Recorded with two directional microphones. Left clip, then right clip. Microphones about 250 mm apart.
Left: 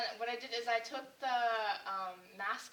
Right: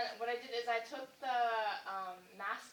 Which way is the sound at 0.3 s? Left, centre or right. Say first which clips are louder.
Left 1 dB; centre.